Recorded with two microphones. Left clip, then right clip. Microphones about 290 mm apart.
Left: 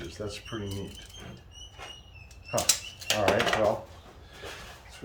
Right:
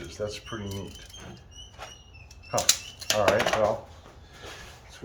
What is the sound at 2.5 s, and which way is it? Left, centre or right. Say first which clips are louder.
Bird flight: right 2 dB; centre.